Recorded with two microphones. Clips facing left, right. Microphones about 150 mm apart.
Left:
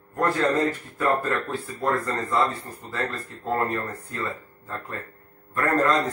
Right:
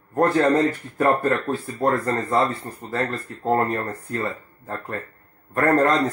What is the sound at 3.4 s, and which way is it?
Speech, 50° right (ahead or behind).